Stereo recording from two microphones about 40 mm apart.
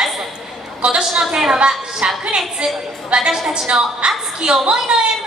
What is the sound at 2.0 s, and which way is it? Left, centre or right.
A man's voice, right.